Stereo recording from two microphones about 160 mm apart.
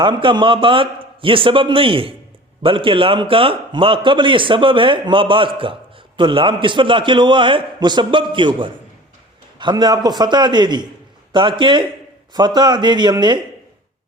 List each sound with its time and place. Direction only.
0.0 s a man's voice: 30° right (ahead or behind)